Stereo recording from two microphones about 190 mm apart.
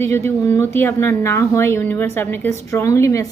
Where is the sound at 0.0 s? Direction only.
10° left (ahead or behind).